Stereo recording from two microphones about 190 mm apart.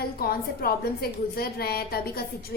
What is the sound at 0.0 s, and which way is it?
A woman's voice, 50° left (ahead or behind).